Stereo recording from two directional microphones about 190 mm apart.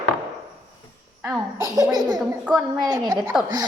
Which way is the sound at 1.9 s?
20° right (ahead or behind).